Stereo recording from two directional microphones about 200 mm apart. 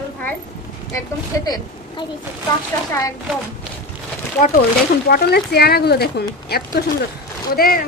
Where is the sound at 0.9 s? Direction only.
20° left (ahead or behind).